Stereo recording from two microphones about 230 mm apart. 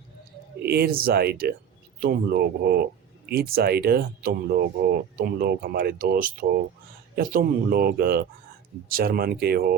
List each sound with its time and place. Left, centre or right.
0.6 s speech: right